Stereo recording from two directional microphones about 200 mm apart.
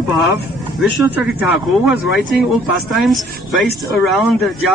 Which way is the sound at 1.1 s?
5° right (ahead or behind).